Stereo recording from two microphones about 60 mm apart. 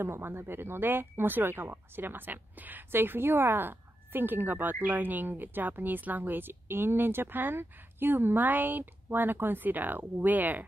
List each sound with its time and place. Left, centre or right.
0.0 s speech: right